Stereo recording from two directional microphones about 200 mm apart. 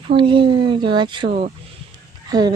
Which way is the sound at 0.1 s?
25° right (ahead or behind).